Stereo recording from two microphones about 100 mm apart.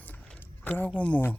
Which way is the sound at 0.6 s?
20° left (ahead or behind).